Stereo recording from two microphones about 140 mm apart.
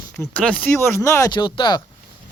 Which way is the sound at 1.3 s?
35° left (ahead or behind).